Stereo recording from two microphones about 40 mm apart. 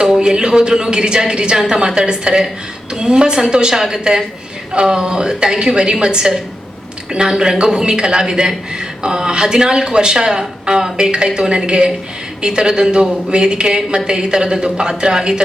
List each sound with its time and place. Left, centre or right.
0.0 s a woman's voice: centre